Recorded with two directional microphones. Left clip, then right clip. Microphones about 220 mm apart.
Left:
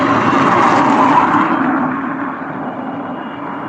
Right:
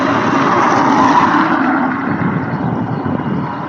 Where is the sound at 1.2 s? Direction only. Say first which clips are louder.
Right 1 dB; 20° right (ahead or behind).